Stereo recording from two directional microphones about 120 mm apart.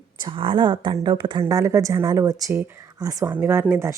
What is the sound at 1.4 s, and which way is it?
Speech, 25° right (ahead or behind).